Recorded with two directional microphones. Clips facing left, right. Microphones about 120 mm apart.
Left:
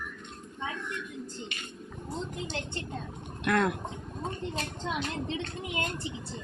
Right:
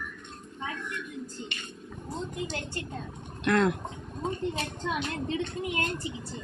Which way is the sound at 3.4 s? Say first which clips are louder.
Right 2 dB; 5° left (ahead or behind).